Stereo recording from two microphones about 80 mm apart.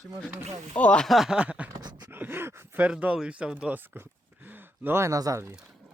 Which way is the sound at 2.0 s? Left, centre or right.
Right.